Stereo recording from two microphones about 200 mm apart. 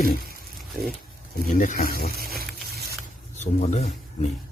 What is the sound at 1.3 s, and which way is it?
Speech, 45° left (ahead or behind).